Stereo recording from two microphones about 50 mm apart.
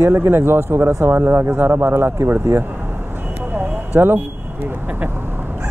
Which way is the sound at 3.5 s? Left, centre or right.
Right.